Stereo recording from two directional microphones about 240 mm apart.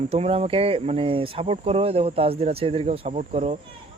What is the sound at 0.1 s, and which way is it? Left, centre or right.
Speech, right.